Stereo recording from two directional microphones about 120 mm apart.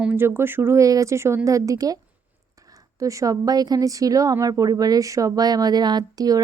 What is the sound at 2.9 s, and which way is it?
A woman's voice, 30° right (ahead or behind).